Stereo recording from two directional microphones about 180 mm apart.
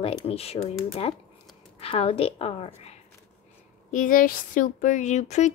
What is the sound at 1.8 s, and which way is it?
A woman's voice, 35° left (ahead or behind).